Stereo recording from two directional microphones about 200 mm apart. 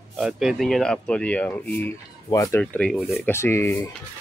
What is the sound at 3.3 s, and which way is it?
Speech, 10° left (ahead or behind).